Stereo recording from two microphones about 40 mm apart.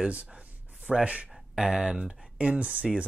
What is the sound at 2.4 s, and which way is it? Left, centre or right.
Speech, right.